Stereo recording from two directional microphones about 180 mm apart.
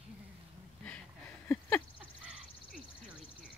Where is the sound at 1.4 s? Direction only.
10° left (ahead or behind).